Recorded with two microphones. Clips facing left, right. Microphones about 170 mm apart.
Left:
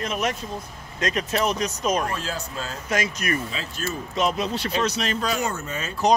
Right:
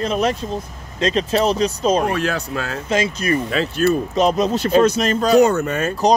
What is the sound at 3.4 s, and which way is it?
Speech, 70° right (ahead or behind).